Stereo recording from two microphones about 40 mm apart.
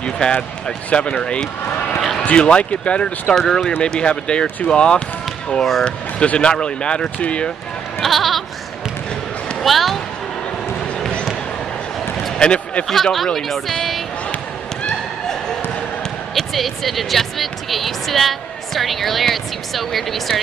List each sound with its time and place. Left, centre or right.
0.0 s speech: left
3.3 s speech: centre
3.8 s speech: left
5.6 s speech: centre
5.9 s speech: left
8.0 s bleat: centre
9.6 s speech: centre
12.4 s a sound: left
12.8 s speech: centre
16.5 s speech: centre